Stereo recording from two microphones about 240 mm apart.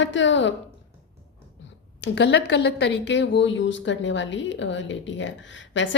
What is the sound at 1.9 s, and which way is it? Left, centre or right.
Speech, left.